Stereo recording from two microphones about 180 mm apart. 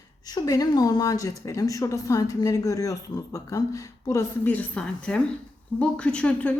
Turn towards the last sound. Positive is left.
turn(degrees=5)  # may be behind; listen again after turning